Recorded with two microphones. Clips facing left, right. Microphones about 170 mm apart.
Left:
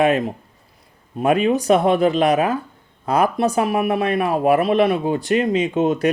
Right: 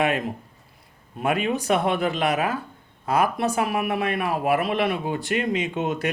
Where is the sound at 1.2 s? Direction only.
30° left (ahead or behind).